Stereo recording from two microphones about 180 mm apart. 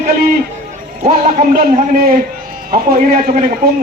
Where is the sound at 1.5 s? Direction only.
55° right (ahead or behind).